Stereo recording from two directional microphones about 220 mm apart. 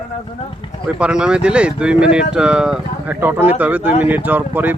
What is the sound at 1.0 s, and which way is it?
Speech, 5° right (ahead or behind).